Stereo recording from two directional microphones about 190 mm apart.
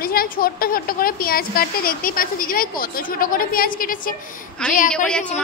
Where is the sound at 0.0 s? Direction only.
50° left (ahead or behind).